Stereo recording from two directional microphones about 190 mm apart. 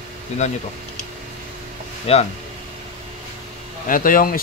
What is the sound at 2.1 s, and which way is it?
Speech, 30° left (ahead or behind).